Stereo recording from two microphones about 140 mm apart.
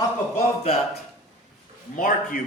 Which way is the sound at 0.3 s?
50° left (ahead or behind).